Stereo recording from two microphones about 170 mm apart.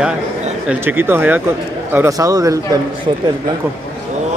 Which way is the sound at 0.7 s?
10° right (ahead or behind).